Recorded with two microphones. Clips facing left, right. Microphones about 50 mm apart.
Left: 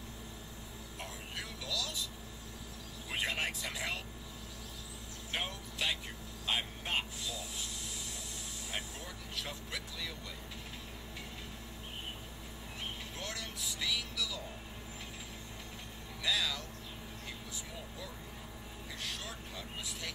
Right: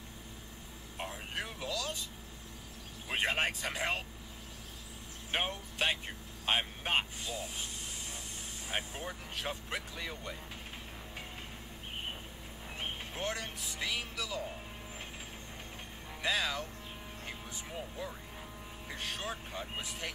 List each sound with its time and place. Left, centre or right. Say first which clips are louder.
1.3 s speech: right 2 dB; right
3.1 s speech: right 4 dB; right
5.3 s speech: right 4 dB; right
8.6 s speech: right 5 dB; right
12.8 s speech: right 6 dB; right
16.2 s speech: right 2 dB; right
17.7 s speech: right 5 dB; right